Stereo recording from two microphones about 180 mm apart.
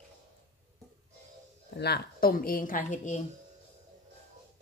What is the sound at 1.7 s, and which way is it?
A woman's voice, 65° left (ahead or behind).